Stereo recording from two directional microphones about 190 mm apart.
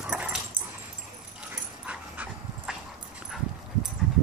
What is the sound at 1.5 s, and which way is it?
Dog, 5° right (ahead or behind).